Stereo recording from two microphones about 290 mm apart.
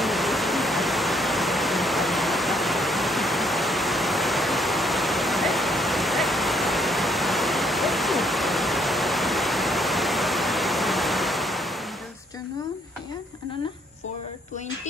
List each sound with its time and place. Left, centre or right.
0.0 s pink noise: centre